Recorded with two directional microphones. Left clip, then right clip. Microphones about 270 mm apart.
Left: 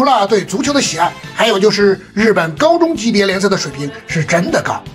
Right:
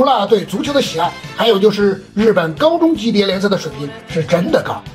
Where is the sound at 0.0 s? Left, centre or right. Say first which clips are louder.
Left 1 dB; left.